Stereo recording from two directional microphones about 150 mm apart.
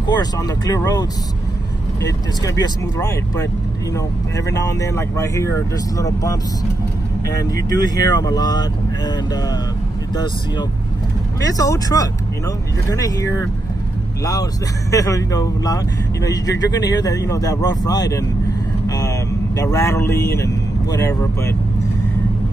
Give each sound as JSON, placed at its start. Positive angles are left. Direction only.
{"t": 0.0, "sound": "speech", "side_deg": 25}
{"t": 2.4, "sound": "speech", "side_deg": 25}
{"t": 4.5, "sound": "speech", "side_deg": 25}
{"t": 11.4, "sound": "speech", "side_deg": 25}
{"t": 18.9, "sound": "vehicle", "side_deg": 25}
{"t": 20.3, "sound": "speech", "side_deg": 20}